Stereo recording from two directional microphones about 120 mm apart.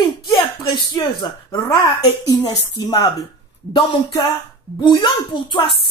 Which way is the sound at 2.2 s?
35° left (ahead or behind).